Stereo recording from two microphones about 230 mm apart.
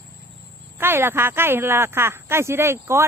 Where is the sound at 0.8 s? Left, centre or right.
Centre.